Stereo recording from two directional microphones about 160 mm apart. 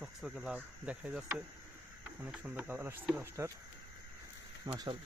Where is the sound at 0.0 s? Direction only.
Centre (ahead or behind).